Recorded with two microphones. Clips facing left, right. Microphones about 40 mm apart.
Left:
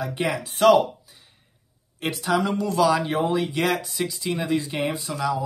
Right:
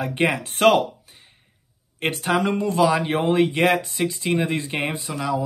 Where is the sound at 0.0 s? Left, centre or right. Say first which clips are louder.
Right 4 dB; right.